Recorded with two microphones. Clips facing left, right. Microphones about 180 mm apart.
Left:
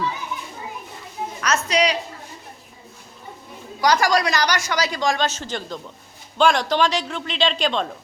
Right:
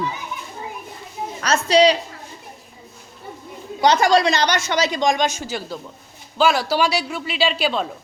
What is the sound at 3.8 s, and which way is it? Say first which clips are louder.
A woman's voice: right 3 dB; 25° right (ahead or behind).